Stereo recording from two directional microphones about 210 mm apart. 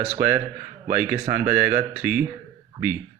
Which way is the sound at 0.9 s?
10° right (ahead or behind).